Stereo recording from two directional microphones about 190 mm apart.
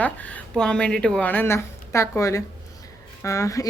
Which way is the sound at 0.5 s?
5° left (ahead or behind).